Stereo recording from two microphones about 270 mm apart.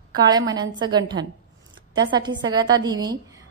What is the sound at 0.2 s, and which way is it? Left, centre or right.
A woman's voice, centre.